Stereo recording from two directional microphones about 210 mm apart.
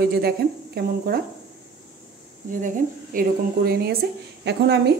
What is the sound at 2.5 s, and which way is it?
Speech, 40° right (ahead or behind).